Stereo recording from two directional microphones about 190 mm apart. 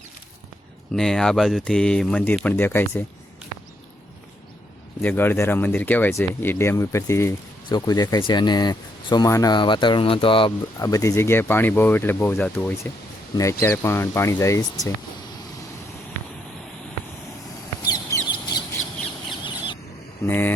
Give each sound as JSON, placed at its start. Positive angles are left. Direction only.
{"t": 0.9, "sound": "speech", "side_deg": 0}
{"t": 4.9, "sound": "speech", "side_deg": 10}
{"t": 17.8, "sound": "a sound", "side_deg": 20}
{"t": 18.3, "sound": "bird", "side_deg": 25}
{"t": 20.2, "sound": "speech", "side_deg": 10}